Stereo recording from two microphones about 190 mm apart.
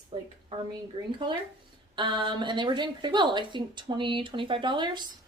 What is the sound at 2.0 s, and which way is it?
A woman's voice, 25° right (ahead or behind).